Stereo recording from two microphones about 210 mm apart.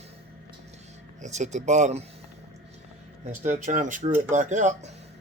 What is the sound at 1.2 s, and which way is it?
Speech, 35° right (ahead or behind).